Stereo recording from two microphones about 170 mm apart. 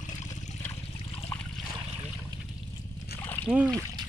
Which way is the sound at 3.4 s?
10° right (ahead or behind).